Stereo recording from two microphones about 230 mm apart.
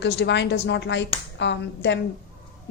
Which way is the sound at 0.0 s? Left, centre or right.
Left.